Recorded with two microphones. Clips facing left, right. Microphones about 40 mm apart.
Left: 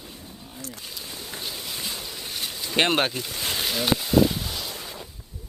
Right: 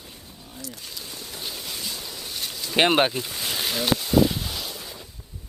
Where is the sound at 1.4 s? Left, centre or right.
Centre.